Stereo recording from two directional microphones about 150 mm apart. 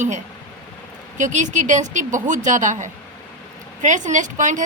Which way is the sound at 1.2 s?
55° right (ahead or behind).